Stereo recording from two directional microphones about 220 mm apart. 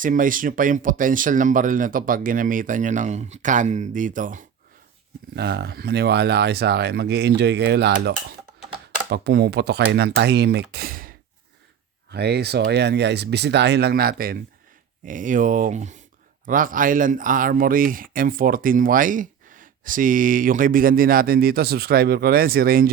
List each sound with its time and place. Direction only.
0.0 s speech: 40° right (ahead or behind)
5.3 s speech: 45° right (ahead or behind)
12.1 s speech: 50° right (ahead or behind)